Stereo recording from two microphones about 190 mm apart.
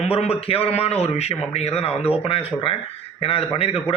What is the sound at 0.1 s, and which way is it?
A man's voice, 30° left (ahead or behind).